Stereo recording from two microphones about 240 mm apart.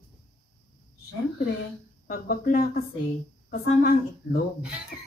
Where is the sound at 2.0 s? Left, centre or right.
Left.